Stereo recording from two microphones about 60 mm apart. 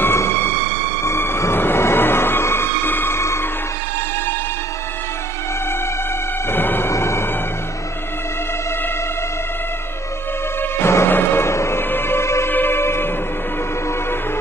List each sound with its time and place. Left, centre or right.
0.0 s train: left
6.5 s music: left
6.9 s music: left
10.6 s music: left
12.4 s music: left